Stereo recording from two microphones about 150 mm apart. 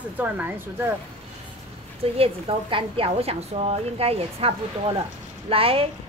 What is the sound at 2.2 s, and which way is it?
A woman's voice, 35° right (ahead or behind).